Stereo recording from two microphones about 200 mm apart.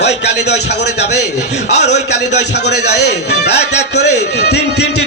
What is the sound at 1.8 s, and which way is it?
Speech, 60° left (ahead or behind).